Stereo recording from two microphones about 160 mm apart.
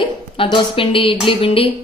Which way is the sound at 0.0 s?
30° left (ahead or behind).